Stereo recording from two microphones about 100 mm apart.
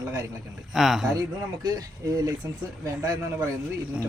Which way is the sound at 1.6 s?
40° right (ahead or behind).